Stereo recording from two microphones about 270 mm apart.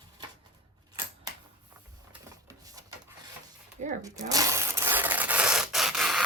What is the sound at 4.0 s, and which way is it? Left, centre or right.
Rub, centre.